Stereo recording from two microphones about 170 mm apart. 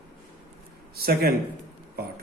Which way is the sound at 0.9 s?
65° right (ahead or behind).